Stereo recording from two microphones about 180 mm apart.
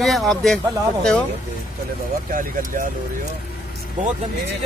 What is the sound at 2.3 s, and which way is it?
Speech, 50° right (ahead or behind).